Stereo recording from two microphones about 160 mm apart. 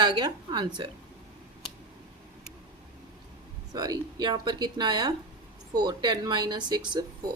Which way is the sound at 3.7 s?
25° right (ahead or behind).